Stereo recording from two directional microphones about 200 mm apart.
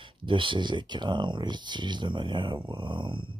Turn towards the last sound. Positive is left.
turn(degrees=-25)  # may be behind; listen again after turning